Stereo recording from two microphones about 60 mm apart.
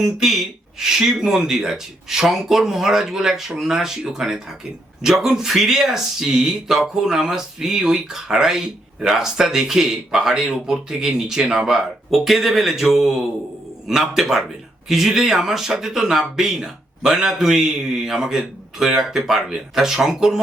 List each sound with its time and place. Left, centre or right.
0.0 s speech: centre